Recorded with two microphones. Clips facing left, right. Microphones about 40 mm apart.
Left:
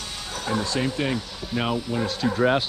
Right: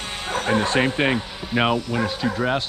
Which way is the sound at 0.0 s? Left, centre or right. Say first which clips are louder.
Right 7 dB; right.